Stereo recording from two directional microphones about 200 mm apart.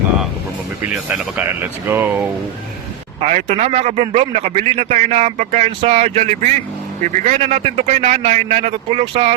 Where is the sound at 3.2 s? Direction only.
35° right (ahead or behind).